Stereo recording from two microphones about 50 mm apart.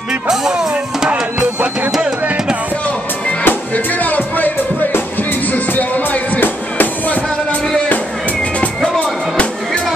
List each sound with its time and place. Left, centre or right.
0.3 s drum: centre
1.9 s music: centre
3.4 s music: left
5.5 s music: left